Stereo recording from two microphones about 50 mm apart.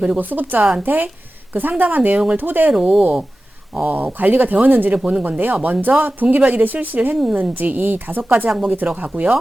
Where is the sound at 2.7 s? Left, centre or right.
Centre.